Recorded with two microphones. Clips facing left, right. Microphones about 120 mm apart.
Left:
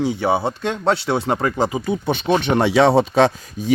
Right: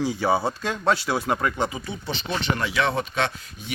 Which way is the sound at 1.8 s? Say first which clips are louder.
Left 10 dB; 55° left (ahead or behind).